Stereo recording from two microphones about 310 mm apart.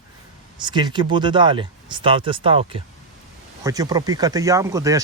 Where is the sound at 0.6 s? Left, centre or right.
Centre.